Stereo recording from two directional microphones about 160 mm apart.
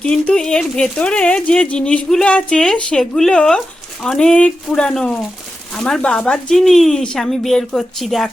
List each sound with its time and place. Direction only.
0.0 s speech: 5° left (ahead or behind)